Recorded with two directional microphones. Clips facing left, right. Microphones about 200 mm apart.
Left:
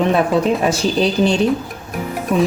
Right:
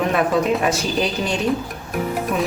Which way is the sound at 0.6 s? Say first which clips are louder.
Left 4 dB; 30° left (ahead or behind).